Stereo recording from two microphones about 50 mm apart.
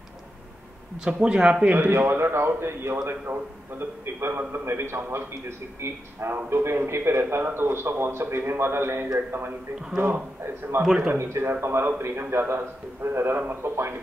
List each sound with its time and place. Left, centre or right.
0.9 s speech: centre
1.6 s speech: right
1.9 s a man's voice: right
11.1 s a man's voice: right